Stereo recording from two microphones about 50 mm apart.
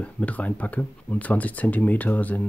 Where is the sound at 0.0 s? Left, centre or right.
Left.